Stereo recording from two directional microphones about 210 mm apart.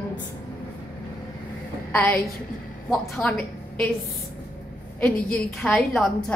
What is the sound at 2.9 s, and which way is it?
A woman's voice, 5° left (ahead or behind).